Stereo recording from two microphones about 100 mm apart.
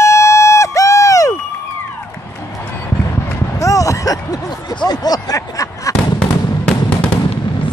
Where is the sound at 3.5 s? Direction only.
35° left (ahead or behind).